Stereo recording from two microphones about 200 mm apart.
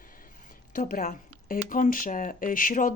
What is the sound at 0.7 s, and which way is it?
Speech, 40° left (ahead or behind).